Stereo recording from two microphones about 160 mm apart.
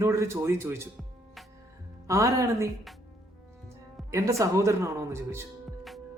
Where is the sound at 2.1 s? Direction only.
20° right (ahead or behind).